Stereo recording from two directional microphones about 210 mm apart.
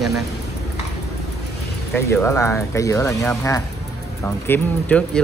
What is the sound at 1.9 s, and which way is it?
Speech, 10° left (ahead or behind).